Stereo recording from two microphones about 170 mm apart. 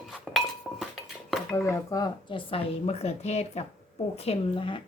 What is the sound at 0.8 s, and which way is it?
Dishes, centre (ahead or behind).